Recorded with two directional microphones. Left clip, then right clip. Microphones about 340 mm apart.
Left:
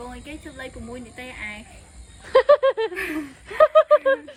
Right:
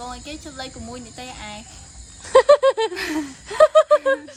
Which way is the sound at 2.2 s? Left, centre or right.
Centre.